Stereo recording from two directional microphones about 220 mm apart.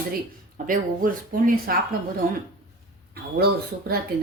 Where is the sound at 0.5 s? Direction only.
40° right (ahead or behind).